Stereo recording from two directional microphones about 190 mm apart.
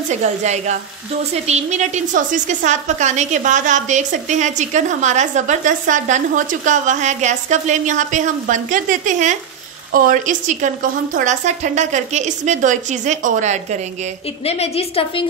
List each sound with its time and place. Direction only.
0.1 s a woman's voice: 35° right (ahead or behind)
14.4 s a woman's voice: 35° left (ahead or behind)